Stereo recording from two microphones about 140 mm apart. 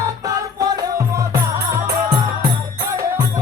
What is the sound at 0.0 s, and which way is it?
Music, 25° right (ahead or behind).